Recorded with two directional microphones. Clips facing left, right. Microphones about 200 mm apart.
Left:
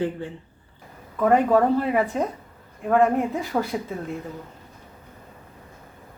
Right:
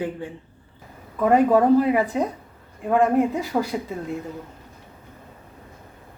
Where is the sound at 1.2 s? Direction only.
10° right (ahead or behind).